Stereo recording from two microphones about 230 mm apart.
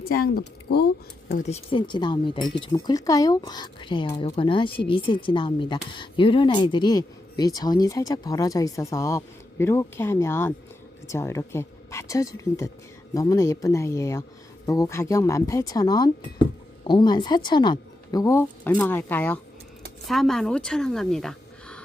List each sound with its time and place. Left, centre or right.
0.0 s speech: left
1.7 s speech: centre